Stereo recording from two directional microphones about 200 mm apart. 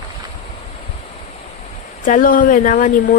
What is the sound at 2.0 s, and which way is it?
Speech, 40° left (ahead or behind).